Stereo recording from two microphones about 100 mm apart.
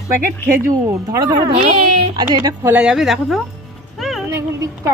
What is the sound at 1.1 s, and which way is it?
Speech, 40° right (ahead or behind).